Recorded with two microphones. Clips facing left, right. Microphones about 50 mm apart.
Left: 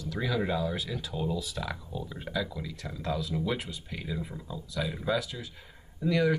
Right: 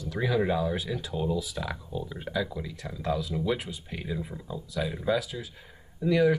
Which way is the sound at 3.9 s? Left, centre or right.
Centre.